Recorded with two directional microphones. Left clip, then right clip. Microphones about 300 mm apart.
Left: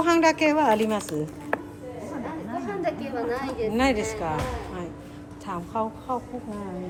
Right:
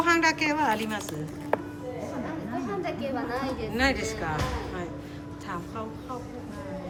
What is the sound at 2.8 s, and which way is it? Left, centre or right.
Speech, left.